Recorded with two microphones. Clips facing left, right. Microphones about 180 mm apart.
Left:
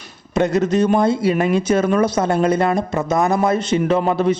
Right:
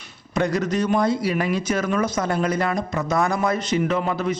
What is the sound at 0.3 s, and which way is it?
A man's voice, 25° left (ahead or behind).